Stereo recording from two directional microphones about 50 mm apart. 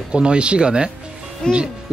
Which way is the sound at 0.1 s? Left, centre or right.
Right.